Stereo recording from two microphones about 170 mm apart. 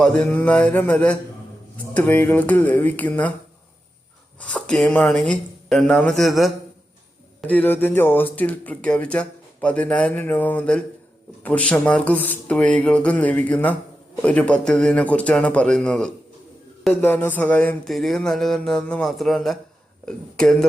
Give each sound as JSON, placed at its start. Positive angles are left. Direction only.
{"t": 0.0, "sound": "speech", "side_deg": 10}
{"t": 4.4, "sound": "speech", "side_deg": 5}